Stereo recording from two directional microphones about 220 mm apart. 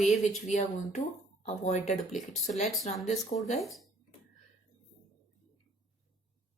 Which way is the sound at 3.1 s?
30° left (ahead or behind).